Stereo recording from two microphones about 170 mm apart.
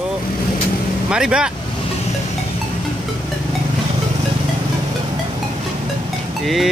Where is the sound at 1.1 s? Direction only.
5° right (ahead or behind).